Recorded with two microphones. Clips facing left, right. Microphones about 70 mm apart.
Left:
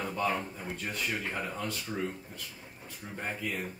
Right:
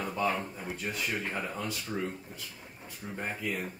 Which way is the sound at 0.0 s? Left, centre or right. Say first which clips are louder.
Right 1 dB; centre.